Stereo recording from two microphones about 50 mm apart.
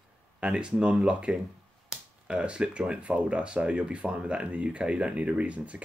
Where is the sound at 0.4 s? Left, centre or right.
Centre.